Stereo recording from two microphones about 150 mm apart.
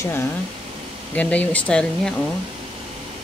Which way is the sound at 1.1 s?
10° left (ahead or behind).